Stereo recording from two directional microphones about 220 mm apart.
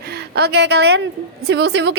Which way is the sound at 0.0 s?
45° right (ahead or behind).